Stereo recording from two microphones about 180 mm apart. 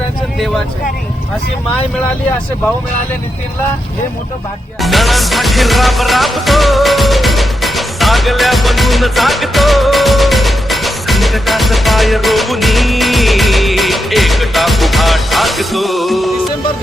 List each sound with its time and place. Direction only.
4.8 s music: centre (ahead or behind)